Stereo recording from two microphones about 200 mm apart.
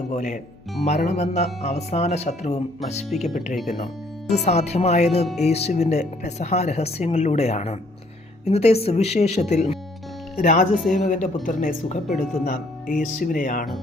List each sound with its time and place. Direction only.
0.1 s speech: 35° left (ahead or behind)
3.5 s speech: centre (ahead or behind)
4.4 s speech: 35° left (ahead or behind)